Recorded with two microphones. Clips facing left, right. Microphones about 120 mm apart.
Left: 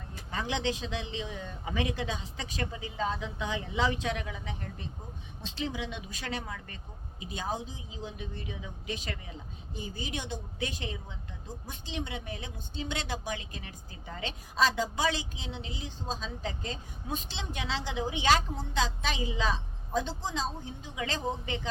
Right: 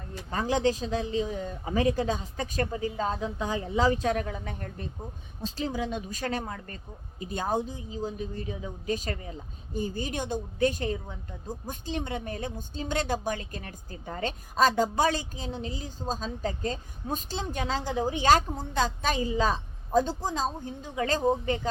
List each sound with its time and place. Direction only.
0.1 s a man's voice: 40° right (ahead or behind)